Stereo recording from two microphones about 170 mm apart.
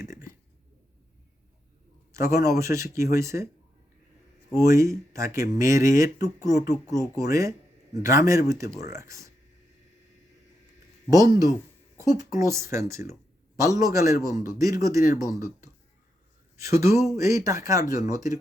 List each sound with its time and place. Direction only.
2.1 s speech: 15° right (ahead or behind)
4.5 s speech: 15° right (ahead or behind)
11.1 s speech: 20° right (ahead or behind)